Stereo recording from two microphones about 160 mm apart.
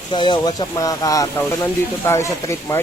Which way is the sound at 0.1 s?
30° left (ahead or behind).